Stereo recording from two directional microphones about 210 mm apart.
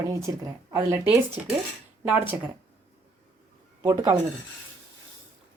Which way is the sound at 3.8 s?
15° right (ahead or behind).